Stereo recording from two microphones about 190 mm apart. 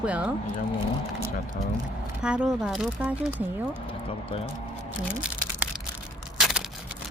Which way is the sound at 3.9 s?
30° left (ahead or behind).